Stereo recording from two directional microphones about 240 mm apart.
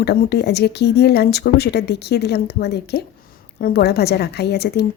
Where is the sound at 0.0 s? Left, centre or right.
Left.